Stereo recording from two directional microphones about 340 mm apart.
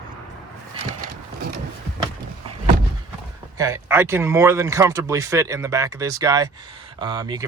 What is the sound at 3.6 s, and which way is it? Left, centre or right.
Speech, centre.